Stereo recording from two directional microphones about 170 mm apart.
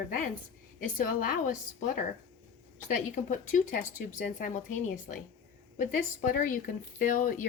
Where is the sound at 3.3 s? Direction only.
45° left (ahead or behind).